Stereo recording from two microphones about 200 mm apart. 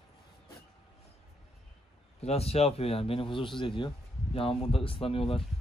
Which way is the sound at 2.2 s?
30° left (ahead or behind).